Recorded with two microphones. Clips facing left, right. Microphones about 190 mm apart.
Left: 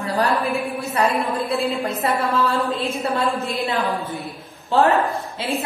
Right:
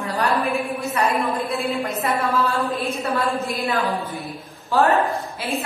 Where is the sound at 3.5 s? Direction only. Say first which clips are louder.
Even; 20° left (ahead or behind).